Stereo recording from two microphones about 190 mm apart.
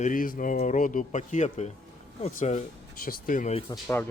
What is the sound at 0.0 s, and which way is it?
Speech, 45° left (ahead or behind).